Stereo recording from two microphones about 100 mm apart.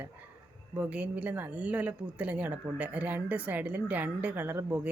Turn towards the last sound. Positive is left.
turn(degrees=-20)  # may be behind; listen again after turning